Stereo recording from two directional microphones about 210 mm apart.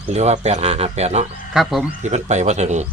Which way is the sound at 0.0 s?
30° right (ahead or behind).